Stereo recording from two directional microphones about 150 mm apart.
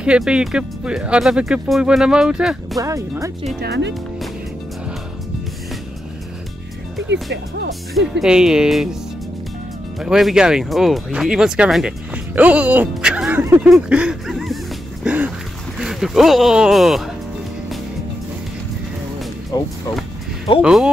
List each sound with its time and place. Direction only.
0.0 s speech: 5° right (ahead or behind)
2.8 s speech: 20° right (ahead or behind)
7.9 s speech: 5° right (ahead or behind)
9.9 s speech: centre (ahead or behind)
15.0 s a sound: 10° right (ahead or behind)
15.8 s speech: centre (ahead or behind)
19.5 s speech: 25° left (ahead or behind)
20.6 s speech: 5° right (ahead or behind)